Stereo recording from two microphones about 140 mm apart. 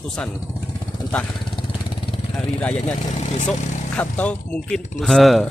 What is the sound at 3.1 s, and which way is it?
Speech, 55° left (ahead or behind).